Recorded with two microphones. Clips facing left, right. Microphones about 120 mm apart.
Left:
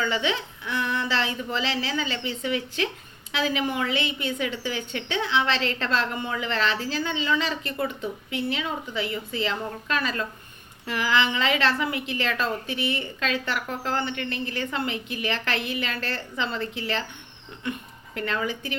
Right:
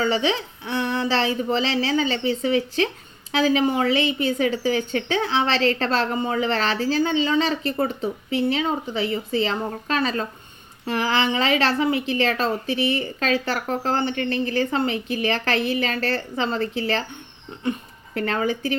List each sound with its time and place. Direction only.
0.0 s a woman's voice: 35° right (ahead or behind)